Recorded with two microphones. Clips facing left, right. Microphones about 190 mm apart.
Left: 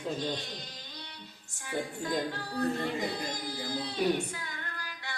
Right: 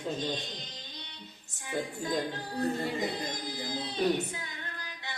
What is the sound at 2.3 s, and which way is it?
Speech, 20° right (ahead or behind).